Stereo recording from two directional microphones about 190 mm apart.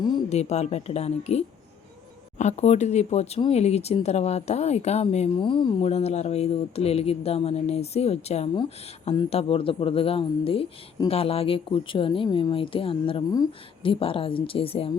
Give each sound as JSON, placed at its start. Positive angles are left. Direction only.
{"t": 0.3, "sound": "speech", "side_deg": 35}